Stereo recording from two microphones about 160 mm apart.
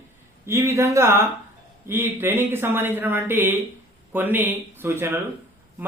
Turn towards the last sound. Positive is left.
turn(degrees=-15)  # may be behind; listen again after turning